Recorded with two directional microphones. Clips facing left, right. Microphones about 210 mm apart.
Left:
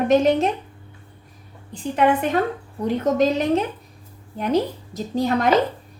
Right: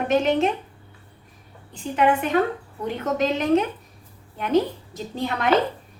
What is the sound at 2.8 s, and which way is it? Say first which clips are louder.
Speech: left 5 dB; 40° left (ahead or behind).